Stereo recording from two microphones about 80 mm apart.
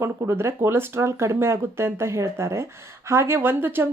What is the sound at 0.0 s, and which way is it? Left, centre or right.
Speech, right.